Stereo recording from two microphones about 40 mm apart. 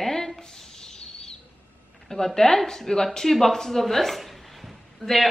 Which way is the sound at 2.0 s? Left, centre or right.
Centre.